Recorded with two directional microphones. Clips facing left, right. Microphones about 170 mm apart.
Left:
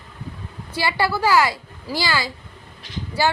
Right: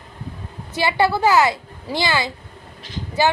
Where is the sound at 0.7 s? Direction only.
20° right (ahead or behind).